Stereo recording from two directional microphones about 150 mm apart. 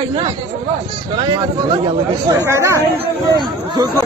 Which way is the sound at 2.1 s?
20° right (ahead or behind).